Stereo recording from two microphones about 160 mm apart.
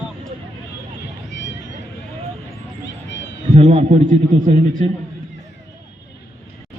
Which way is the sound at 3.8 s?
50° right (ahead or behind).